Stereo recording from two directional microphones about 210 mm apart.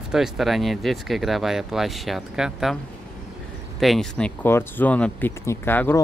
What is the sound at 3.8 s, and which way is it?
Speech, centre (ahead or behind).